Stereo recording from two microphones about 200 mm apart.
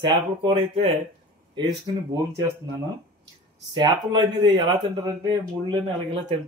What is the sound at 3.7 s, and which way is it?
Speech, 20° right (ahead or behind).